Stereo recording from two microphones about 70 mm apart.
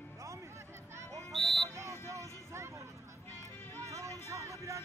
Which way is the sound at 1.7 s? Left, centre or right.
Right.